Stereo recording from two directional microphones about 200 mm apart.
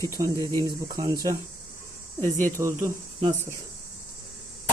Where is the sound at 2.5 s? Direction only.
15° right (ahead or behind).